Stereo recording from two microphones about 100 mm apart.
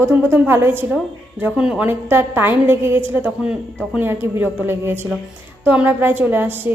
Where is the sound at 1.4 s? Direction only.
10° right (ahead or behind).